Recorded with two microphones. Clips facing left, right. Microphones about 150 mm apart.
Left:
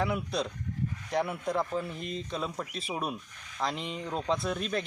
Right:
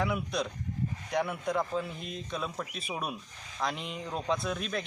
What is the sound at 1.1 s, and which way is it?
A man's voice, 5° left (ahead or behind).